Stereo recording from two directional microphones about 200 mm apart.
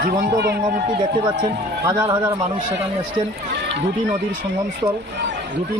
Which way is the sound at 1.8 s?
15° right (ahead or behind).